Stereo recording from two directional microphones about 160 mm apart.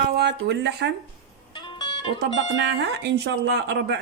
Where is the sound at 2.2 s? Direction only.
90° right.